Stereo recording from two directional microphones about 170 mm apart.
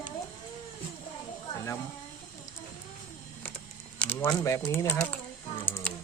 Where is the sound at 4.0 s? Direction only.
10° left (ahead or behind).